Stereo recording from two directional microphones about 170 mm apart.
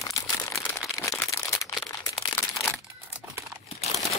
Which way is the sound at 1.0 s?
20° left (ahead or behind).